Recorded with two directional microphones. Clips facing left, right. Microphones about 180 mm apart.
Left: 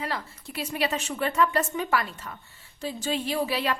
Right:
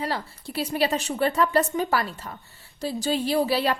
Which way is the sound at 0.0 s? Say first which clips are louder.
Right 3 dB; 35° right (ahead or behind).